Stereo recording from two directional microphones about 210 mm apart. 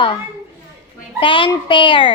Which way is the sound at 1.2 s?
25° left (ahead or behind).